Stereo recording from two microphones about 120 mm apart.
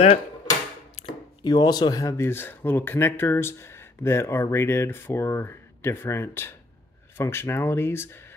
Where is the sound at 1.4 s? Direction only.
35° left (ahead or behind).